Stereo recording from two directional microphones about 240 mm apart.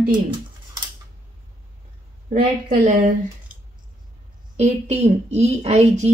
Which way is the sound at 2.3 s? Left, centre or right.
Right.